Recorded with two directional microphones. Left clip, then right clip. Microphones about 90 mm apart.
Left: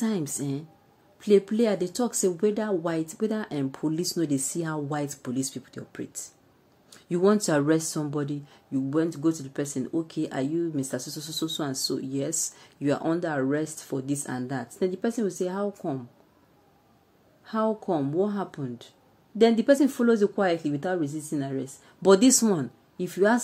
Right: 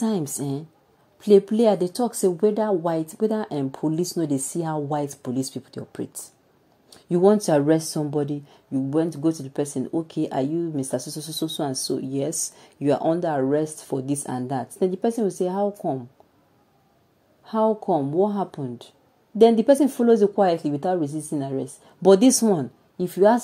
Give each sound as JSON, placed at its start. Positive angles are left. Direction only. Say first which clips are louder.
{"t": 0.0, "sound": "a woman's voice", "louder": "right 4 dB", "side_deg": -35}
{"t": 1.9, "sound": "a woman's voice", "louder": "right 4 dB", "side_deg": -25}
{"t": 6.9, "sound": "speech", "louder": "right 5 dB", "side_deg": -25}
{"t": 7.5, "sound": "a woman's voice", "louder": "right 4 dB", "side_deg": -30}
{"t": 17.7, "sound": "a woman's voice", "louder": "right 5 dB", "side_deg": -30}